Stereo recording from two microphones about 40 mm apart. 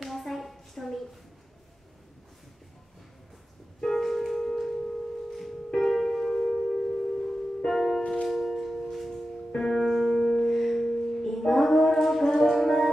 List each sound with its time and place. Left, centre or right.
0.0 s a sound: centre
3.8 s music: centre
6.7 s music: centre
9.5 s music: centre
9.8 s music: centre